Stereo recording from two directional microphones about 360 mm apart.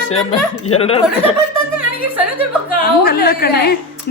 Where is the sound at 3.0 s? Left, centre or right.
Left.